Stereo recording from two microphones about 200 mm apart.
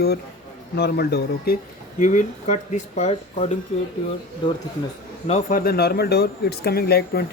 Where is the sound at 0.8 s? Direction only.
50° left (ahead or behind).